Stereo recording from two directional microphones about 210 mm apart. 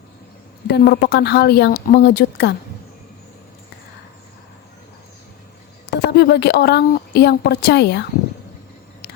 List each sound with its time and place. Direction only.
0.7 s speech: 50° left (ahead or behind)
5.9 s speech: 50° left (ahead or behind)